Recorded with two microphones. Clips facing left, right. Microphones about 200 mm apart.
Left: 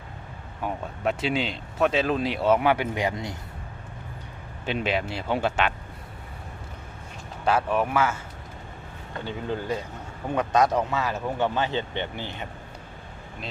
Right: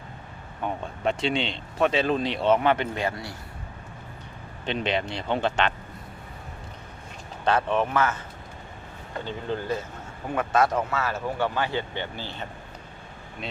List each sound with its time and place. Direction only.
0.6 s speech: 5° left (ahead or behind)
4.6 s speech: 5° left (ahead or behind)
7.4 s speech: 5° left (ahead or behind)
9.2 s speech: 15° left (ahead or behind)